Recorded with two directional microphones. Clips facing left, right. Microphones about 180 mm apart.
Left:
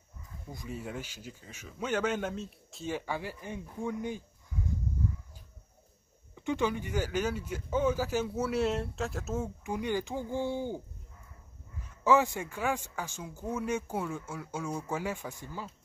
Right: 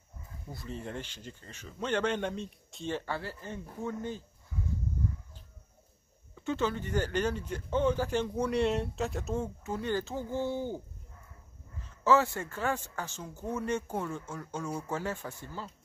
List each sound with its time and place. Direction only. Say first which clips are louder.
0.5 s a man's voice: even; 10° left (ahead or behind)
6.3 s a man's voice: left 1 dB; 15° left (ahead or behind)
11.8 s a man's voice: even; 15° left (ahead or behind)